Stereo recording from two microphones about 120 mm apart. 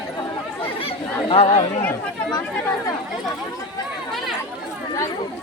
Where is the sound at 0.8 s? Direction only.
50° left (ahead or behind).